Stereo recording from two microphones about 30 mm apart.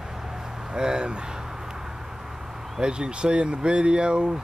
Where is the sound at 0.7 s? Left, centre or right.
Right.